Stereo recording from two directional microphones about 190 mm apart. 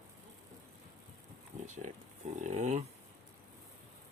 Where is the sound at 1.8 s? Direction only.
40° right (ahead or behind).